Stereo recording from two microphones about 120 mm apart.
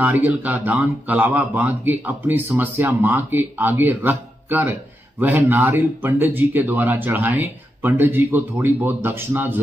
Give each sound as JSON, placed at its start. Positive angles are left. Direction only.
{"t": 0.0, "sound": "speech", "side_deg": -15}